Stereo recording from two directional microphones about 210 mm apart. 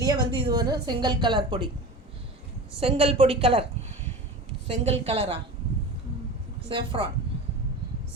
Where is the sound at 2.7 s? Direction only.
25° right (ahead or behind).